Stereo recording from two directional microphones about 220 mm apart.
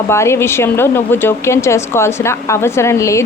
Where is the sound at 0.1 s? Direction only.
10° left (ahead or behind).